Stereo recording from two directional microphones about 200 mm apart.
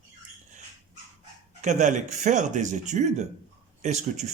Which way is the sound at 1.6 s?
35° right (ahead or behind).